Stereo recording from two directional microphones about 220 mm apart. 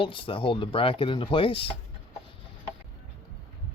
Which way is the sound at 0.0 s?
25° left (ahead or behind).